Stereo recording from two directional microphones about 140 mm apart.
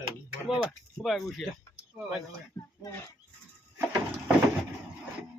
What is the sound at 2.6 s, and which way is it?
Speech, 20° left (ahead or behind).